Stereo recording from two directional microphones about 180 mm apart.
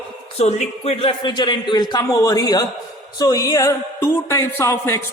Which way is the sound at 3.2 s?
20° left (ahead or behind).